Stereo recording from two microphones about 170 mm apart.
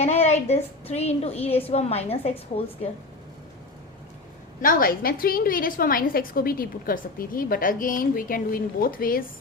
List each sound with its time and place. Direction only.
0.0 s a woman's voice: 40° left (ahead or behind)
4.6 s a woman's voice: 60° left (ahead or behind)